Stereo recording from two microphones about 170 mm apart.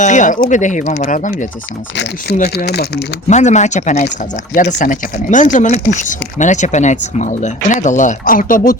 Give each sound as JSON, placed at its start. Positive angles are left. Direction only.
{"t": 0.0, "sound": "speech", "side_deg": 45}
{"t": 2.6, "sound": "speech", "side_deg": 70}
{"t": 3.2, "sound": "speech", "side_deg": 45}